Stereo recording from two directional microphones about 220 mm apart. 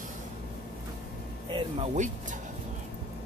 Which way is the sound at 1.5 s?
30° right (ahead or behind).